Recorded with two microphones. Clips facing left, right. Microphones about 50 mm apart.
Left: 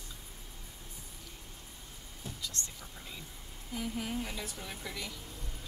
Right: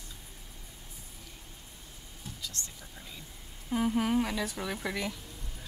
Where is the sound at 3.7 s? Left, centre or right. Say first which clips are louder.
Right 9 dB; right.